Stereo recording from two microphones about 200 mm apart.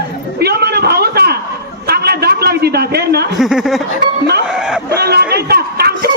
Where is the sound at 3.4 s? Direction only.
Centre (ahead or behind).